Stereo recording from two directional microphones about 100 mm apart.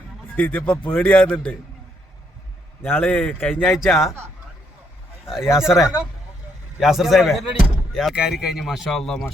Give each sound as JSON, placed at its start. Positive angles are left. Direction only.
{"t": 0.3, "sound": "a man's voice", "side_deg": 20}
{"t": 2.8, "sound": "a man's voice", "side_deg": 20}
{"t": 3.7, "sound": "speech", "side_deg": 0}
{"t": 5.2, "sound": "speech", "side_deg": -5}